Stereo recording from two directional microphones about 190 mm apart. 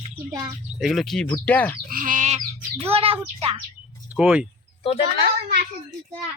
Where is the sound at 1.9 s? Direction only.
45° right (ahead or behind).